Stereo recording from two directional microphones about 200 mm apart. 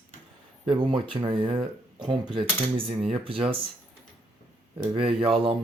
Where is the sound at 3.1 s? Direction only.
25° right (ahead or behind).